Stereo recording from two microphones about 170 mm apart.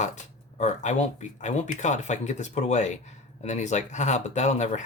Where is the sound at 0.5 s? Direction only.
45° left (ahead or behind).